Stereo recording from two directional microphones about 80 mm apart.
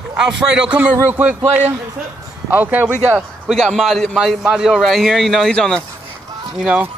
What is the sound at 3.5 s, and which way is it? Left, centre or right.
A man's voice, centre.